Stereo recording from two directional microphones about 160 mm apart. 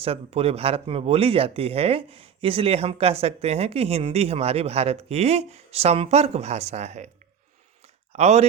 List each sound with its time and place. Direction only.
0.0 s speech: 40° right (ahead or behind)
8.1 s speech: 45° right (ahead or behind)